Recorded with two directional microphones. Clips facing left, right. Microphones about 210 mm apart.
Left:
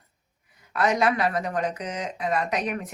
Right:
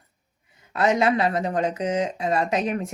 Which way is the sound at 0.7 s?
25° right (ahead or behind).